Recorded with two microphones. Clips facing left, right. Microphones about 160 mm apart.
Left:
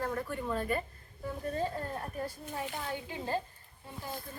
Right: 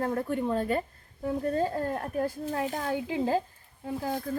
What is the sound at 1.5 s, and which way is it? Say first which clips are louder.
Speech: right 6 dB; 55° right (ahead or behind).